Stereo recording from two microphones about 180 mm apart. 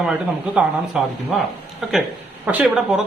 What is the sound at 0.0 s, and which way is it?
A man's voice, 5° right (ahead or behind).